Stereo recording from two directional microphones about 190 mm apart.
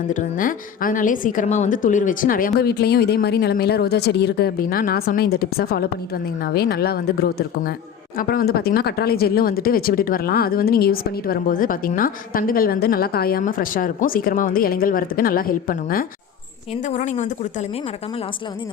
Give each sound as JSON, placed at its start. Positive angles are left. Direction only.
{"t": 0.1, "sound": "speech", "side_deg": 45}